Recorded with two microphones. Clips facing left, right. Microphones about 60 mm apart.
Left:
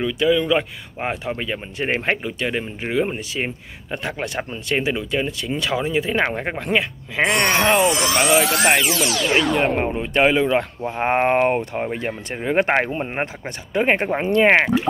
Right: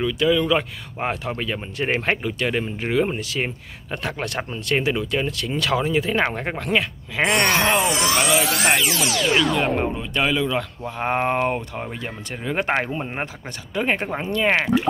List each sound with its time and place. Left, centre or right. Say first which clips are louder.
0.0 s speech: left 1 dB; centre
9.8 s speech: left 4 dB; left